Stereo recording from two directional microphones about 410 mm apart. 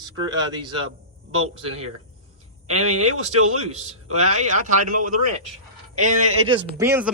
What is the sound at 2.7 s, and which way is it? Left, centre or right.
Speech, right.